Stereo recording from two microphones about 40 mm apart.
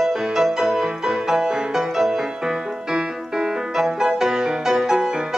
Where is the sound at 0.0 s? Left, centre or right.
Centre.